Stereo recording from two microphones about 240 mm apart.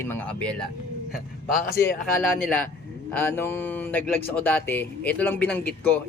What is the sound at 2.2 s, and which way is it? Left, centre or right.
Speech, centre.